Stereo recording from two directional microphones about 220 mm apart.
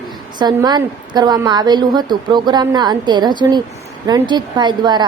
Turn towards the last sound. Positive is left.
turn(degrees=-20)  # may be behind; listen again after turning